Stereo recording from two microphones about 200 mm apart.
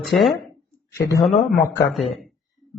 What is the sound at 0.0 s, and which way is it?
Speech, centre (ahead or behind).